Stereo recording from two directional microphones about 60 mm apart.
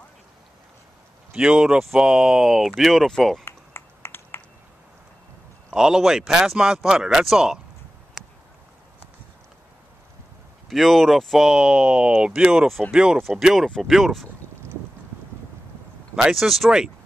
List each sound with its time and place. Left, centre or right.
1.3 s speech: centre
3.4 s a sound: left
5.7 s speech: centre
8.2 s a sound: centre
10.7 s speech: centre
16.2 s speech: centre